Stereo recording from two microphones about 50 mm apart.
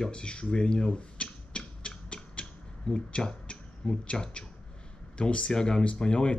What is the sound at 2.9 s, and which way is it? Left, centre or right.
Speech, left.